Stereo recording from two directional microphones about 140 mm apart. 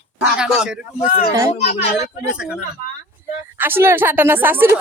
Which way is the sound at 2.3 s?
5° right (ahead or behind).